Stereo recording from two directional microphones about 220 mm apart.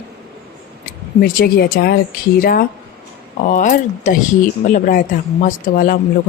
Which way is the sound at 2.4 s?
40° left (ahead or behind).